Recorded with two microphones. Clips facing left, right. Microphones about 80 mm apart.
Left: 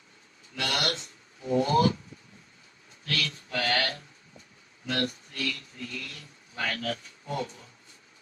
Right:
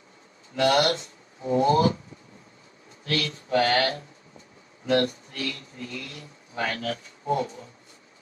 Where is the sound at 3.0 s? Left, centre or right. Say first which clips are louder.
Right 4 dB; right.